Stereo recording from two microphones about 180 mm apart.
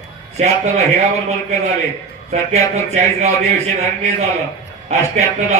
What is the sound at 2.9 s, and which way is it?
Speech, 40° right (ahead or behind).